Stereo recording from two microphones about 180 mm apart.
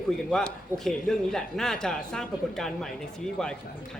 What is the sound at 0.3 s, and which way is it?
A man's voice, 5° left (ahead or behind).